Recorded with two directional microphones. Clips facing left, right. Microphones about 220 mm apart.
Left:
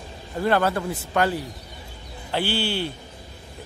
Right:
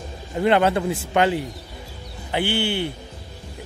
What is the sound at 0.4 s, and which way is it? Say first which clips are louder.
A man's voice: right 3 dB; 20° right (ahead or behind).